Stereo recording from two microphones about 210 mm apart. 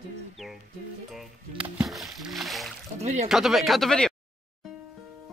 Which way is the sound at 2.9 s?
30° right (ahead or behind).